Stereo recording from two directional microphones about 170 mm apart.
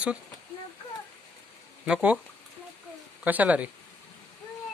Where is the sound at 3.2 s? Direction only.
10° right (ahead or behind).